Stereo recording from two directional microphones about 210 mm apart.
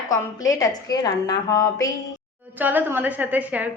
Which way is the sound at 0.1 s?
15° left (ahead or behind).